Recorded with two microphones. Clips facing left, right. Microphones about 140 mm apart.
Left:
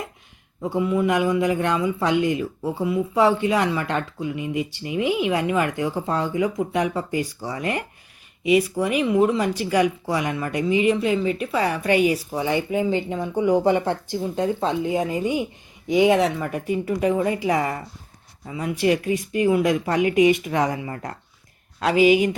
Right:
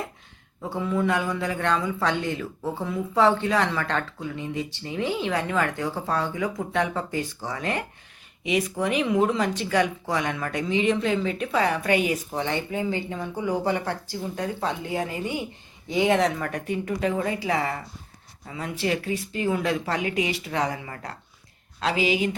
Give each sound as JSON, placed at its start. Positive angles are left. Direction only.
{"t": 0.6, "sound": "a man's voice", "side_deg": 10}
{"t": 21.8, "sound": "speech", "side_deg": 45}